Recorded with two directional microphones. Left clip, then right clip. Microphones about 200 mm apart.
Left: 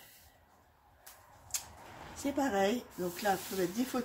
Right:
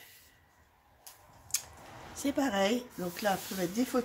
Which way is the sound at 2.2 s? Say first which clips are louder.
Right 1 dB; 40° right (ahead or behind).